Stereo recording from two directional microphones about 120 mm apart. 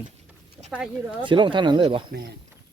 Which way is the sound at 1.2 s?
40° right (ahead or behind).